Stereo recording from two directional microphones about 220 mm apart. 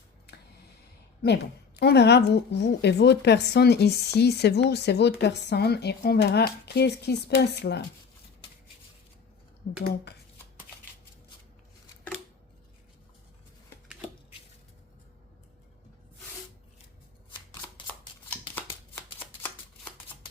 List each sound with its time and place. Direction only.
1.2 s a woman's voice: 50° left (ahead or behind)
9.6 s speech: 35° left (ahead or behind)